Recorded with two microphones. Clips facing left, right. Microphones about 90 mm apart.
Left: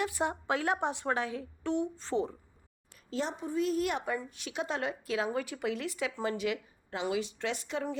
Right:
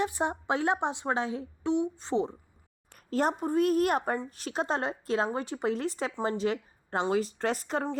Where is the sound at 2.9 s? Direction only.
50° right (ahead or behind).